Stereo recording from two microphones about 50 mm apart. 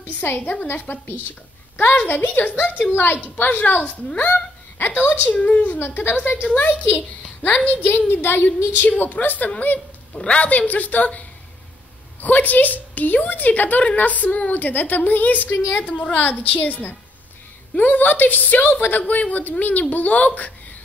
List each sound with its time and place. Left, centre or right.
0.0 s a woman's voice: left
2.0 s a woman's voice: left
5.8 s a woman's voice: left
6.5 s a woman's voice: left
8.1 s a woman's voice: left
10.1 s a woman's voice: left
19.0 s a woman's voice: left